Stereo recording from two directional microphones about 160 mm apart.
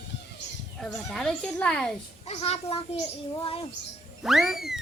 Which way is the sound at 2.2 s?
40° left (ahead or behind).